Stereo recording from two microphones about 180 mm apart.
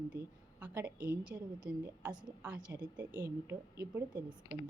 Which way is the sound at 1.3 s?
15° right (ahead or behind).